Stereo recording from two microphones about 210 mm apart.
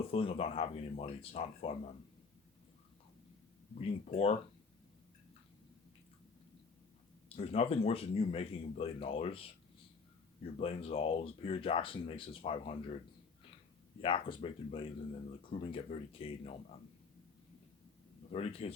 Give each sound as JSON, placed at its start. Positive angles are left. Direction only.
{"t": 0.1, "sound": "speech", "side_deg": 25}
{"t": 3.8, "sound": "speech", "side_deg": 30}
{"t": 7.3, "sound": "speech", "side_deg": 30}
{"t": 14.0, "sound": "speech", "side_deg": 25}
{"t": 18.3, "sound": "speech", "side_deg": 30}